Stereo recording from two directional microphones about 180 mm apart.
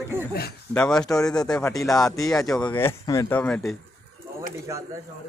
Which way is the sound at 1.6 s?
20° left (ahead or behind).